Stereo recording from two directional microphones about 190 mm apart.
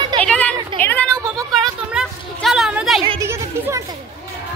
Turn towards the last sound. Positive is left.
turn(degrees=-15)  # may be behind; listen again after turning